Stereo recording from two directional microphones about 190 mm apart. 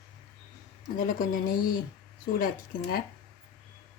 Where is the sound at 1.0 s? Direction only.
45° left (ahead or behind).